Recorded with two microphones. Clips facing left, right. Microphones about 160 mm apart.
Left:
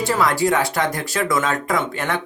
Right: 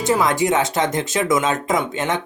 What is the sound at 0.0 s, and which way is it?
Speech, 20° right (ahead or behind).